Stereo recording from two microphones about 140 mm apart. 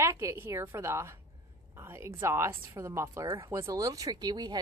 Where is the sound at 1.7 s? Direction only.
20° right (ahead or behind).